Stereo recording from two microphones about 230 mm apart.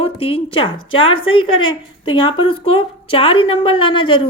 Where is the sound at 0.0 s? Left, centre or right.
Left.